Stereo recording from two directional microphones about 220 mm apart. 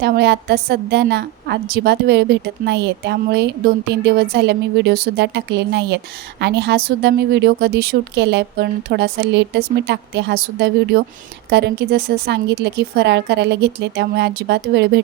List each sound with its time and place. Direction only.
0.0 s a woman's voice: 50° right (ahead or behind)